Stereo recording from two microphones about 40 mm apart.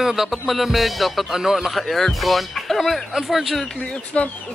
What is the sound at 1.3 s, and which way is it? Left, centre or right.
Speech, centre.